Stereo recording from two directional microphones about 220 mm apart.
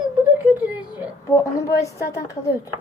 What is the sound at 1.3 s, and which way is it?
A woman's voice, 15° left (ahead or behind).